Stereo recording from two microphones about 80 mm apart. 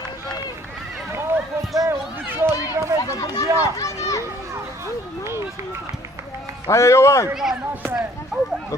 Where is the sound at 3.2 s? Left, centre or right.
Left.